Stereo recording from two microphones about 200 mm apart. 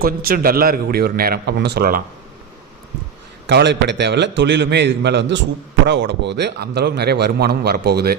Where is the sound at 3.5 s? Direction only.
60° right (ahead or behind).